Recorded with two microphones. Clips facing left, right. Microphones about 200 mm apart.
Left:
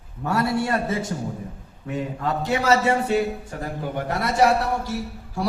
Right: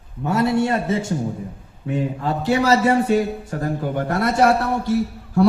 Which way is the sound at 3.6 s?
50° right (ahead or behind).